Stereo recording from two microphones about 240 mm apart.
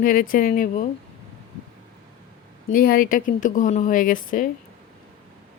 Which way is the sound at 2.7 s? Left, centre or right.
Left.